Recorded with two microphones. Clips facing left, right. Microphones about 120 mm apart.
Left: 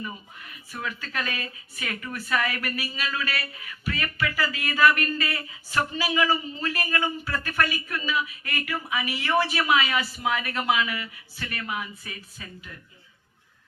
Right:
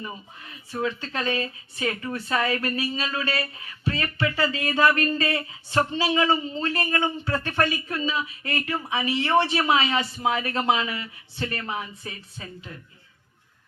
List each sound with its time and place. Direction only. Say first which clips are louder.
0.0 s speech: even; 30° right (ahead or behind)